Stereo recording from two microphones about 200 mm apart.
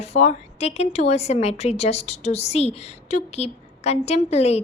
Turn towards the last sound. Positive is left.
turn(degrees=30)  # may be behind; listen again after turning